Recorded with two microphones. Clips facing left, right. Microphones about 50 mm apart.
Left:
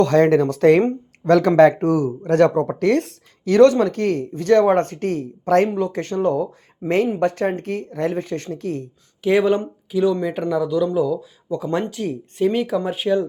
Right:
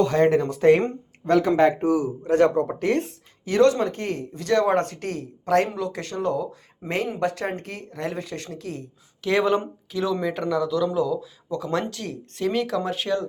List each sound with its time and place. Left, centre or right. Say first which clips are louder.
0.0 s speech: left 4 dB; left
1.2 s speech: left 6 dB; left
1.9 s a man's voice: left 3 dB; left
2.7 s speech: left 5 dB; left
3.5 s speech: left 6 dB; left
9.2 s speech: left 4 dB; centre